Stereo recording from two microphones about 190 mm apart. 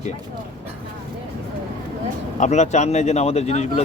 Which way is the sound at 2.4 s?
35° left (ahead or behind).